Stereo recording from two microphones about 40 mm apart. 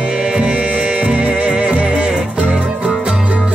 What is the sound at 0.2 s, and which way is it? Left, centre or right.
Music, right.